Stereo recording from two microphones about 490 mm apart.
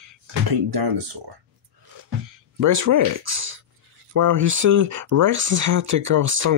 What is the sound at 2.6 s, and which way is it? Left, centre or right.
Speech, right.